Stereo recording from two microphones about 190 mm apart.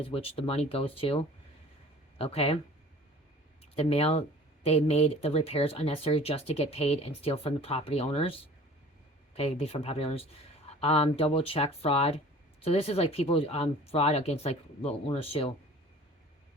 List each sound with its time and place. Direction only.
0.0 s speech: 30° left (ahead or behind)
3.8 s speech: 30° left (ahead or behind)